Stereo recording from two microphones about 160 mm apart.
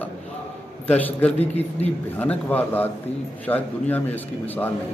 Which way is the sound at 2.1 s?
10° left (ahead or behind).